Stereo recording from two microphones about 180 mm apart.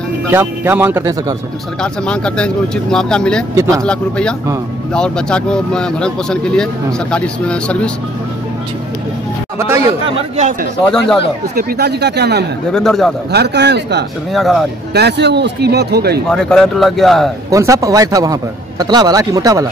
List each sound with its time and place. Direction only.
0.3 s speech: 10° right (ahead or behind)
1.8 s speech: 5° left (ahead or behind)
3.5 s speech: 15° right (ahead or behind)
3.8 s speech: 5° left (ahead or behind)
10.0 s speech: 40° right (ahead or behind)
10.9 s speech: 5° left (ahead or behind)
11.5 s speech: 65° right (ahead or behind)
12.7 s speech: centre (ahead or behind)
13.3 s speech: 70° right (ahead or behind)
14.3 s speech: centre (ahead or behind)
15.0 s speech: 70° right (ahead or behind)
16.3 s speech: 5° left (ahead or behind)
17.5 s a man's voice: 15° right (ahead or behind)